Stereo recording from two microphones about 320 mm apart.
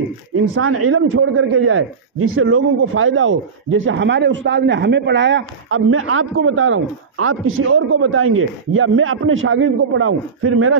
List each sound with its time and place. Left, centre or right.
0.6 s speech: right